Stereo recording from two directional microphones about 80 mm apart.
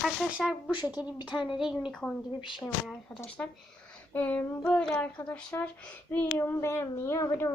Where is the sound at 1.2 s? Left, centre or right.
Centre.